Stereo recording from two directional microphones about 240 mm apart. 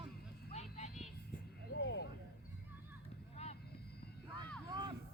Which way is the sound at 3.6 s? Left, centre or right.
Left.